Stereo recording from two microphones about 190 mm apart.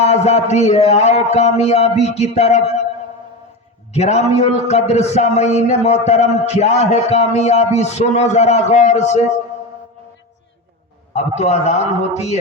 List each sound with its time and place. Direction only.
0.0 s a man's voice: 35° left (ahead or behind)
3.9 s a man's voice: 35° left (ahead or behind)
11.1 s a man's voice: 35° left (ahead or behind)